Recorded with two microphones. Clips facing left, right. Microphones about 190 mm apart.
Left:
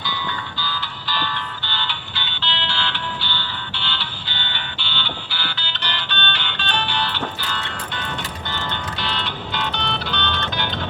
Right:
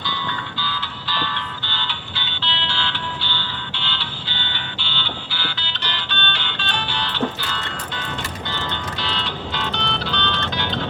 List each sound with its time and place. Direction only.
0.6 s music: 40° left (ahead or behind)